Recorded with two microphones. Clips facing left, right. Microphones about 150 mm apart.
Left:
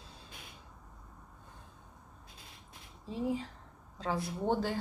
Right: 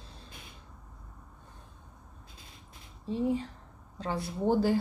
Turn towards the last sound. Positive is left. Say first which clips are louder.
# right 6 dB
turn(degrees=-5)  # may be behind; listen again after turning